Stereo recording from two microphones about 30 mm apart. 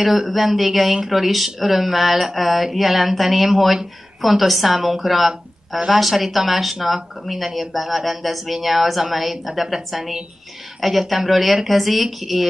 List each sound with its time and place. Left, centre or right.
0.0 s speech: centre